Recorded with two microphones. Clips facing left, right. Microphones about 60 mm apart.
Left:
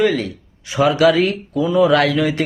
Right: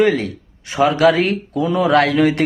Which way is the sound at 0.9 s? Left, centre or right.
Right.